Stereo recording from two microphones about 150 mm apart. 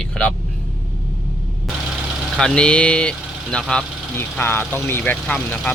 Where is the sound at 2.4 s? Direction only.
5° left (ahead or behind).